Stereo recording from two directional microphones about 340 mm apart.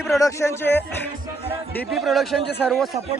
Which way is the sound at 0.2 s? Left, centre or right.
Centre.